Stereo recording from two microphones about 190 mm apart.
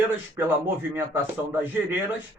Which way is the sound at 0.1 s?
10° right (ahead or behind).